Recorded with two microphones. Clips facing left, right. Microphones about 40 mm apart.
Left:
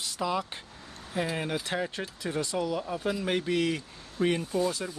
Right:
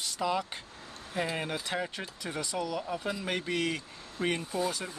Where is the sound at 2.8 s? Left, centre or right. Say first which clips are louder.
Left 3 dB; centre.